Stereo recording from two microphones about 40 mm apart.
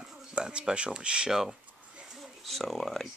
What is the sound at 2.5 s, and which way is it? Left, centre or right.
Speech, centre.